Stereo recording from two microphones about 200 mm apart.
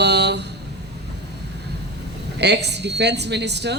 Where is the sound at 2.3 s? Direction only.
55° right (ahead or behind).